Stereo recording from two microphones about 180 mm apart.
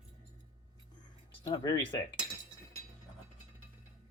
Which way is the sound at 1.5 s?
25° left (ahead or behind).